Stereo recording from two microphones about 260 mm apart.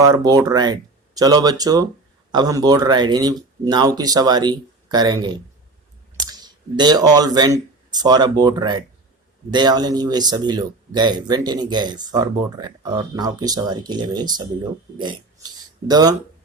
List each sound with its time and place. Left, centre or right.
0.0 s speech: centre